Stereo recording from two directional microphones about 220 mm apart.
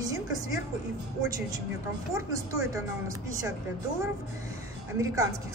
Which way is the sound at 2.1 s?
15° right (ahead or behind).